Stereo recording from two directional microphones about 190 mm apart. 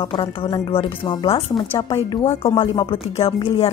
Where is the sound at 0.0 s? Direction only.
30° left (ahead or behind).